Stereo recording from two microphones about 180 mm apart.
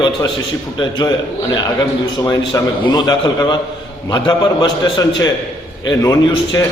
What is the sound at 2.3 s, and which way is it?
A man's voice, 25° left (ahead or behind).